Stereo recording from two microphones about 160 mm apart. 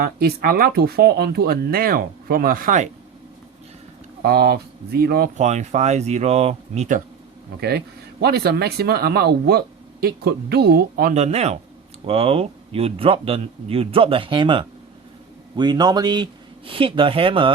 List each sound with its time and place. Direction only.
0.0 s speech: 75° right (ahead or behind); by 2.9 s 55° right (ahead or behind)
4.2 s speech: 75° right (ahead or behind)
5.4 s speech: 45° right (ahead or behind)
8.2 s speech: 80° right
11.1 s speech: 45° right (ahead or behind)